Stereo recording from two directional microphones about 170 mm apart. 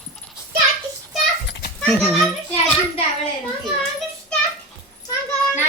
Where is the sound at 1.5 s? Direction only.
90° left.